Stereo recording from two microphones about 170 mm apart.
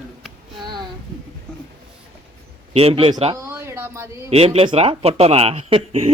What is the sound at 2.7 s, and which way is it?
Speech, 35° right (ahead or behind).